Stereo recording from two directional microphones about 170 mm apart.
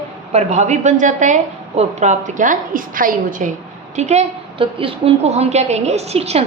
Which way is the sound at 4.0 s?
40° right (ahead or behind).